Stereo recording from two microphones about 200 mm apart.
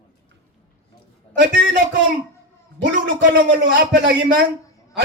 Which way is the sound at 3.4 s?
60° right (ahead or behind).